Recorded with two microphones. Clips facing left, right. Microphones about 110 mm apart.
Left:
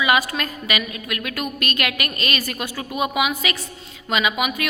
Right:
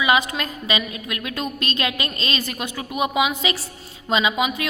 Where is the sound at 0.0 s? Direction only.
20° right (ahead or behind).